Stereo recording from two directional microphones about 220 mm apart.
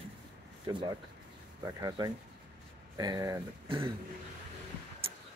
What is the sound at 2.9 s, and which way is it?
Speech, 15° right (ahead or behind).